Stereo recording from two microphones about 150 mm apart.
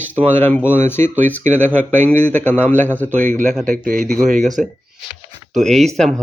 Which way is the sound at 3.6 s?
60° right (ahead or behind).